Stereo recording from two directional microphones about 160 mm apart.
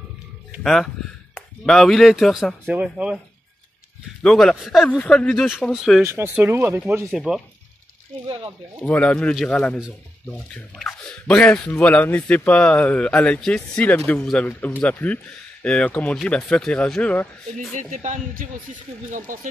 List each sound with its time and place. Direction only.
0.6 s speech: centre (ahead or behind)
4.2 s speech: 5° left (ahead or behind)
6.0 s speech: 15° right (ahead or behind)
7.1 s speech: centre (ahead or behind)
8.8 s speech: 10° left (ahead or behind)
17.7 s speech: 50° right (ahead or behind)